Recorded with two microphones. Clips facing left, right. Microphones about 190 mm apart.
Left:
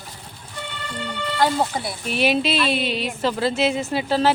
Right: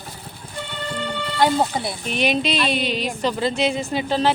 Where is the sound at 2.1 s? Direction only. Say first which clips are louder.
Left 2 dB; 5° left (ahead or behind).